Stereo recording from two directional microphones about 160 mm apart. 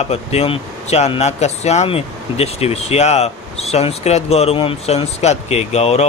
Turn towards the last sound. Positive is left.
turn(degrees=40)  # may be behind; listen again after turning